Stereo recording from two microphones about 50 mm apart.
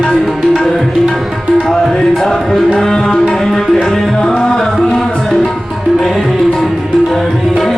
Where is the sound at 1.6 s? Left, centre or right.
Centre.